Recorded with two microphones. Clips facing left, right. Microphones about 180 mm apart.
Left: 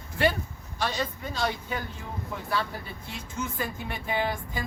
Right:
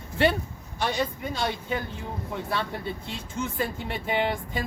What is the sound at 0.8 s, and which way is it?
Speech, 15° right (ahead or behind).